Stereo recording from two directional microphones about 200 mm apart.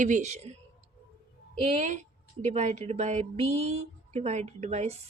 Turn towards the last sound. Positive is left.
turn(degrees=-30)  # may be behind; listen again after turning